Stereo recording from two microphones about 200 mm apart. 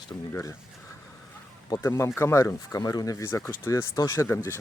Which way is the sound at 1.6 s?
15° left (ahead or behind).